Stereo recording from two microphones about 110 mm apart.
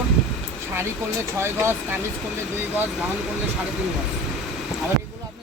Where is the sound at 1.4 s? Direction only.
25° right (ahead or behind).